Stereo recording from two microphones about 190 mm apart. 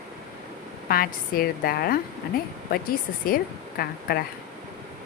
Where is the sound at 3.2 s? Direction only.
50° left (ahead or behind).